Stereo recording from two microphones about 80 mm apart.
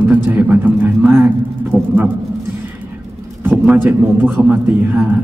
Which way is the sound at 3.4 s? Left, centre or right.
Right.